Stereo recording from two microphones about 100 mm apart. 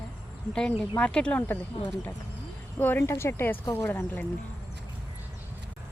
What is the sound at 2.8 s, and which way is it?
Speech, 20° left (ahead or behind).